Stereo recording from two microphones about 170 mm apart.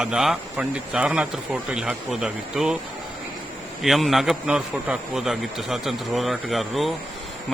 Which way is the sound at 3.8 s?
Centre (ahead or behind).